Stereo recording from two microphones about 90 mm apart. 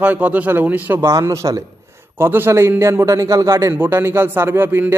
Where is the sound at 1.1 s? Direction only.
35° right (ahead or behind).